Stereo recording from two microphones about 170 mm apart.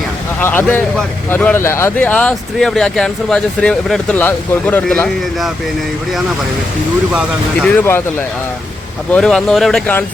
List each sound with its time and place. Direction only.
0.3 s a man's voice: 10° left (ahead or behind)
7.1 s speech: 5° right (ahead or behind)
7.8 s a man's voice: 15° left (ahead or behind)
9.1 s speech: 5° left (ahead or behind)